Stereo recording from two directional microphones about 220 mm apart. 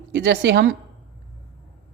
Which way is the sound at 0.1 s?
55° right (ahead or behind).